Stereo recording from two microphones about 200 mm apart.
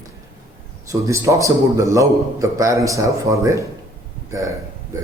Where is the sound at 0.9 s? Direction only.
15° right (ahead or behind).